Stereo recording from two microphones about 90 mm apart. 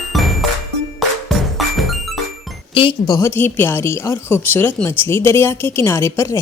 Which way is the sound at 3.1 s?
35° left (ahead or behind).